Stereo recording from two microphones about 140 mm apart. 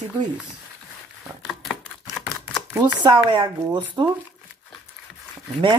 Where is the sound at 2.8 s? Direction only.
30° right (ahead or behind).